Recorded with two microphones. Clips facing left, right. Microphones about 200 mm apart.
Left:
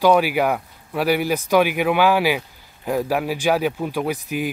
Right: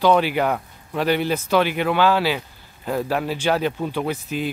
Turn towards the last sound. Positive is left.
turn(degrees=10)  # may be behind; listen again after turning